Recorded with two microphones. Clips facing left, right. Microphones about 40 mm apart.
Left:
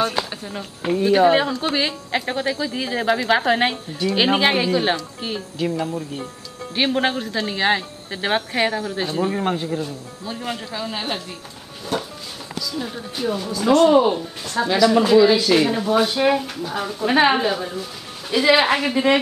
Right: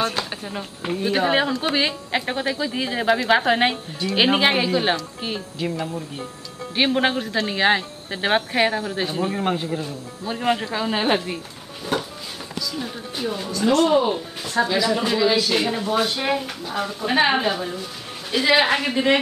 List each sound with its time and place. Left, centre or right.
0.0 s speech: centre
10.3 s speech: right
11.9 s music: centre
12.7 s speech: centre
14.1 s speech: centre